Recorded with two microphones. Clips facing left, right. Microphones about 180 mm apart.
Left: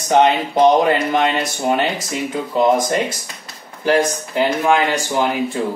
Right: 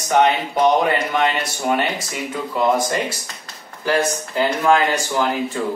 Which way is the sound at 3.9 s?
15° left (ahead or behind).